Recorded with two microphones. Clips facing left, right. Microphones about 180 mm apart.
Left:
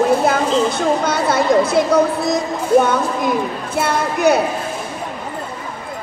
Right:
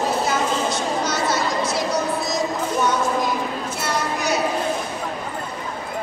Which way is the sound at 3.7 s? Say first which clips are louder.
Left 8 dB; 55° left (ahead or behind).